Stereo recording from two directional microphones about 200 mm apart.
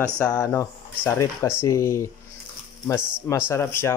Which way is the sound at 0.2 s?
15° left (ahead or behind).